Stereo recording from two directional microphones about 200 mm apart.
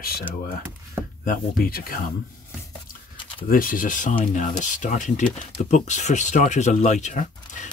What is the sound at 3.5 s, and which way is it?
Speech, 45° left (ahead or behind).